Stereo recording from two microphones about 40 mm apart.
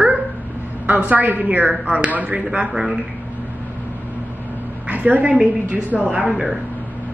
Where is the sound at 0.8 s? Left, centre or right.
Right.